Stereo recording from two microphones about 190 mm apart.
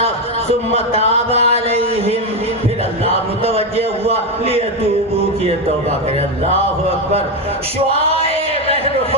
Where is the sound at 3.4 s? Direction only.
30° right (ahead or behind).